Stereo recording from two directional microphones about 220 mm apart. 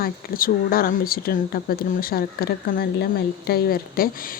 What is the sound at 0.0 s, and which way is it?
Speech, 40° left (ahead or behind).